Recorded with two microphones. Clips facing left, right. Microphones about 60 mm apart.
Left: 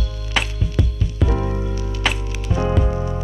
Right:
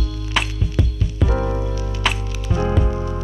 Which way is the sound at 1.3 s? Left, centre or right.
Right.